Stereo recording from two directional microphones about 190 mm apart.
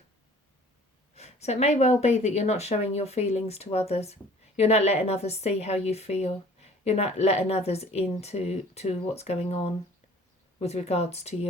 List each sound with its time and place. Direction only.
1.1 s speech: 35° left (ahead or behind)